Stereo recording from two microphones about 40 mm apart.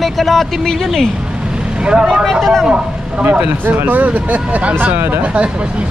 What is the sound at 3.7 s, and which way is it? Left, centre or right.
Speech, right.